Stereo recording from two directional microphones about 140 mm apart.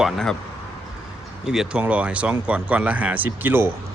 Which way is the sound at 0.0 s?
5° left (ahead or behind).